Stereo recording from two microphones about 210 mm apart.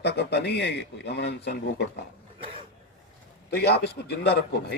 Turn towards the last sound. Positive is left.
turn(degrees=50)  # may be behind; listen again after turning